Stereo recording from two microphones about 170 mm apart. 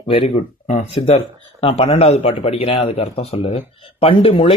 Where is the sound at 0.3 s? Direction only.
40° left (ahead or behind).